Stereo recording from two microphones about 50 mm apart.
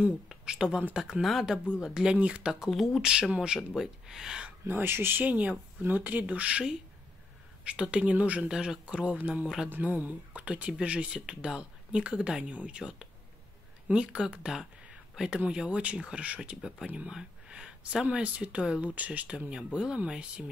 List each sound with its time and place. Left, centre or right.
0.5 s speech: centre
2.1 s speech: right
2.7 s speech: centre
3.0 s speech: centre
4.6 s speech: right
5.2 s speech: right
7.6 s speech: right
8.4 s speech: centre